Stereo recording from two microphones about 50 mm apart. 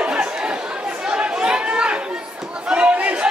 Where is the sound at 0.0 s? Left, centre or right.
Right.